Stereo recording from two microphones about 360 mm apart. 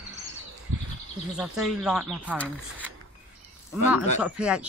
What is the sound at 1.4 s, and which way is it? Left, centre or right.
Speech, centre.